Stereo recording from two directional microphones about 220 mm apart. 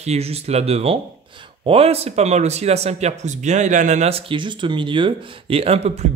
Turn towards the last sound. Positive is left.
turn(degrees=-30)  # may be behind; listen again after turning